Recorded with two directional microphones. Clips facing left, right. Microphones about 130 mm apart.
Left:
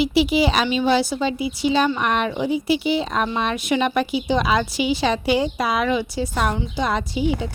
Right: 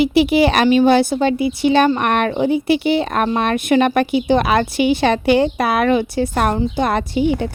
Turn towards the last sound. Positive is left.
turn(degrees=-60)  # may be behind; listen again after turning